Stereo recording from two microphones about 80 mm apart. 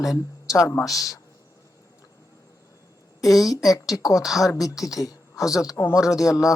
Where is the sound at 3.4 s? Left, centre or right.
Left.